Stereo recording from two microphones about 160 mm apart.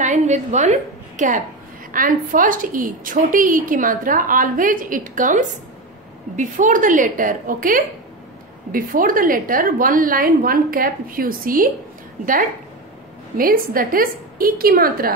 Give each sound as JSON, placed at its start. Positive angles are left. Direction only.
{"t": 0.0, "sound": "a woman's voice", "side_deg": -50}
{"t": 13.4, "sound": "a woman's voice", "side_deg": -65}